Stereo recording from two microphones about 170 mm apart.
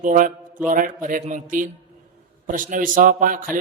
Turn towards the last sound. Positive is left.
turn(degrees=-55)  # may be behind; listen again after turning